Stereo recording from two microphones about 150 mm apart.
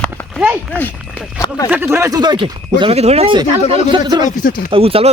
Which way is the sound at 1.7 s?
15° right (ahead or behind).